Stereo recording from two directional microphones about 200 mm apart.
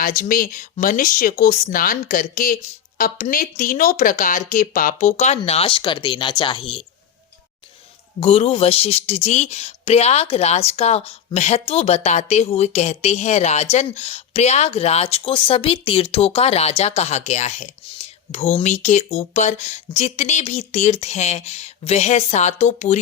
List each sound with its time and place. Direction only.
0.0 s speech: 45° left (ahead or behind); by 6.8 s 25° left (ahead or behind)
8.2 s speech: 30° left (ahead or behind)